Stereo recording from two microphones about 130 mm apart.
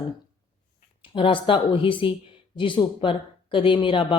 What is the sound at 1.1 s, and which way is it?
Speech, 40° left (ahead or behind).